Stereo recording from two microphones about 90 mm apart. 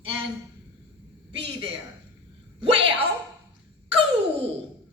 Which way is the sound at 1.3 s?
90° right.